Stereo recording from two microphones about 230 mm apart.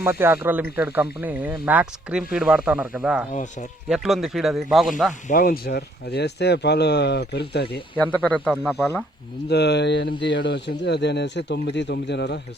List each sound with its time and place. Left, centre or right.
0.0 s speech: centre
3.3 s speech: left
3.8 s speech: centre
5.3 s speech: left
7.9 s speech: centre
9.5 s speech: left